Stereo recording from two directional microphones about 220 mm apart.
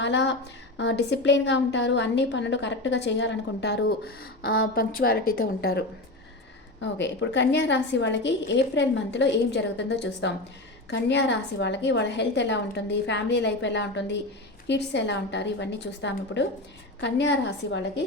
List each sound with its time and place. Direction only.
0.0 s a woman's voice: 50° left (ahead or behind)
7.0 s a woman's voice: 55° left (ahead or behind)